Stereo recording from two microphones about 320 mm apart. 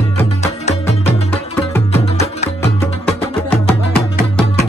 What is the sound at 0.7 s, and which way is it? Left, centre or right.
Music, centre.